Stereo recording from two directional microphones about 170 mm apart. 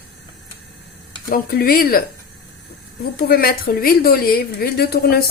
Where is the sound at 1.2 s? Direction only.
60° left (ahead or behind).